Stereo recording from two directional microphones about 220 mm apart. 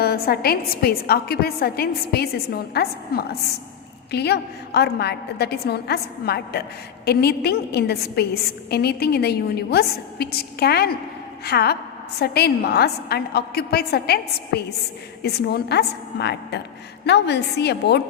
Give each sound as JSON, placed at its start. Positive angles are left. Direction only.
{"t": 0.0, "sound": "a woman's voice", "side_deg": 45}